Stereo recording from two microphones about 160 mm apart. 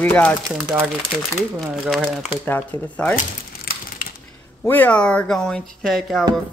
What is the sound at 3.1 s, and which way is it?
Crumpling, 70° left (ahead or behind).